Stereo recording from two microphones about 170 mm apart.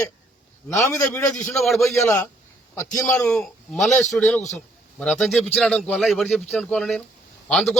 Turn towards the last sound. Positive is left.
turn(degrees=0)  # may be behind; listen again after turning